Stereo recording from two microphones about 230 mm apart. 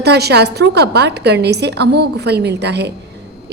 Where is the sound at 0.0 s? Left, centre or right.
Right.